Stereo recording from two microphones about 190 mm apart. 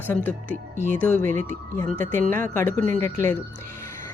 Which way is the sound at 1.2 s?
45° right (ahead or behind).